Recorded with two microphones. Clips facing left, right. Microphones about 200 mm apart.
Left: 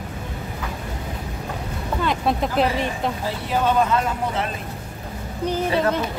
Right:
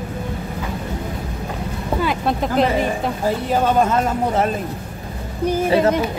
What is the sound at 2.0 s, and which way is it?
Speech, centre (ahead or behind).